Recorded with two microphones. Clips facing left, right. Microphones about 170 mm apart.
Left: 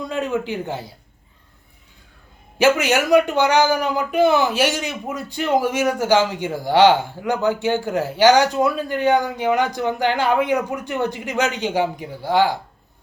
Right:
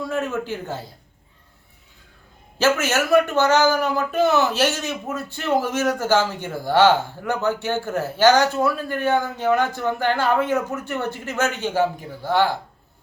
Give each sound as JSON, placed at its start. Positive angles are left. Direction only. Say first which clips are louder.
{"t": 0.0, "sound": "a man's voice", "louder": "left 2 dB", "side_deg": 15}
{"t": 2.6, "sound": "speech", "louder": "left 3 dB", "side_deg": 15}